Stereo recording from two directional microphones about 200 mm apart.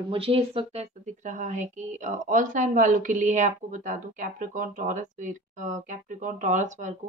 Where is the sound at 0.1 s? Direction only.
30° right (ahead or behind).